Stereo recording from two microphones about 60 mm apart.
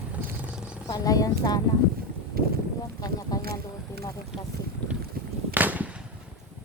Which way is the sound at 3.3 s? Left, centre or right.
Left.